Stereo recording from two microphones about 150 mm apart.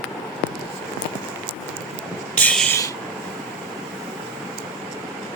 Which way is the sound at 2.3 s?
10° left (ahead or behind).